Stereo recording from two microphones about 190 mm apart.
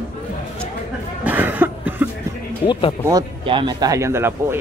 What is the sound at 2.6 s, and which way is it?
Speech, 25° left (ahead or behind).